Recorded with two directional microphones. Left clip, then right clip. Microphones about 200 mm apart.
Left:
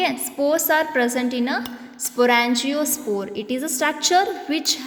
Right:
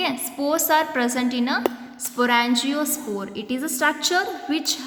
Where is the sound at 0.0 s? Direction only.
15° left (ahead or behind).